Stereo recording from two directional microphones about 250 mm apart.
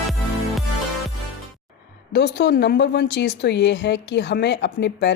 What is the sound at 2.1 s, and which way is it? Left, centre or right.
A woman's voice, left.